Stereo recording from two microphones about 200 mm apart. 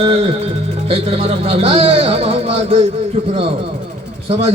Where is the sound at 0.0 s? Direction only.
30° right (ahead or behind).